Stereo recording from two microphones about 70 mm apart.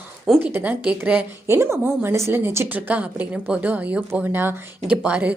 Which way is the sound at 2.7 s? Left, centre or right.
Right.